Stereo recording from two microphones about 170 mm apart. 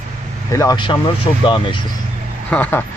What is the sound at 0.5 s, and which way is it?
Speech, 20° left (ahead or behind).